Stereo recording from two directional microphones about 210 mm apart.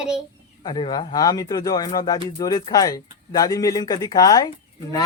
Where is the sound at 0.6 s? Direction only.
20° left (ahead or behind).